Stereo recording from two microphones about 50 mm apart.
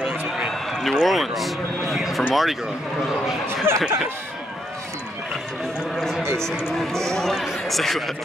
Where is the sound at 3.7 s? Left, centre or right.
Right.